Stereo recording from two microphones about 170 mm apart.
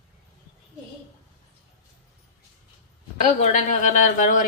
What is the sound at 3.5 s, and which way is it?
Speech, 45° left (ahead or behind).